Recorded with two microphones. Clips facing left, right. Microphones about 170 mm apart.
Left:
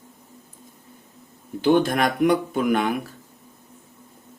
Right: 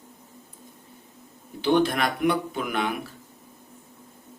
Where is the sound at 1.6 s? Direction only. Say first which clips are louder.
Left 3 dB; 45° left (ahead or behind).